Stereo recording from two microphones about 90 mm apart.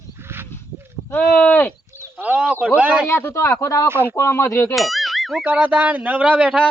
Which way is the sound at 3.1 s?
25° left (ahead or behind).